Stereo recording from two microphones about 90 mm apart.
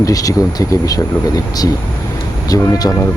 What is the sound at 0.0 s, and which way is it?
Speech, 40° left (ahead or behind).